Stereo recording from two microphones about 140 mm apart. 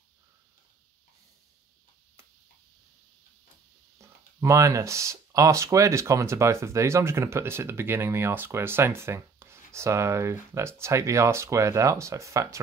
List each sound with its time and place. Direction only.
4.0 s speech: 20° right (ahead or behind)